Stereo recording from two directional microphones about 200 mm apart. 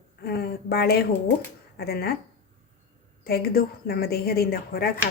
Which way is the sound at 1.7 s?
55° left (ahead or behind).